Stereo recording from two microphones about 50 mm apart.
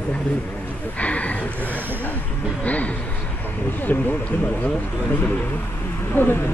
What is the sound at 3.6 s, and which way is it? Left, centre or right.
Speech, left.